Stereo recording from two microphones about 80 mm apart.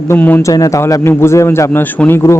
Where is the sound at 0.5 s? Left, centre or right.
Left.